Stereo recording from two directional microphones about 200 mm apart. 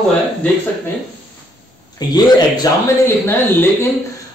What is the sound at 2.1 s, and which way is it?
A man's voice, 15° left (ahead or behind).